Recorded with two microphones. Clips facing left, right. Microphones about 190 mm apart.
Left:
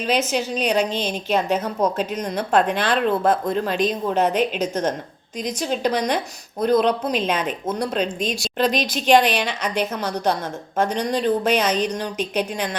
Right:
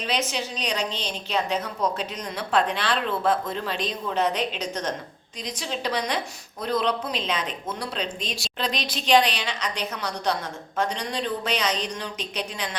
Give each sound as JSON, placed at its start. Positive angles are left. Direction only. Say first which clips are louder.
{"t": 0.3, "sound": "a woman's voice", "louder": "left 7 dB", "side_deg": 45}